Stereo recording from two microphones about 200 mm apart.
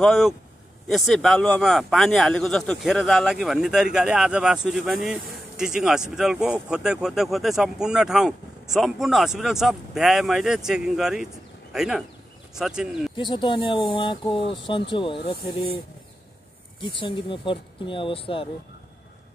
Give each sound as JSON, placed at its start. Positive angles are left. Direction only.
{"t": 0.0, "sound": "speech", "side_deg": 0}
{"t": 13.1, "sound": "speech", "side_deg": 20}
{"t": 16.8, "sound": "speech", "side_deg": 25}